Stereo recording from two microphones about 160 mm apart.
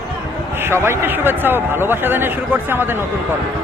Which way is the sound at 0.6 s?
15° right (ahead or behind).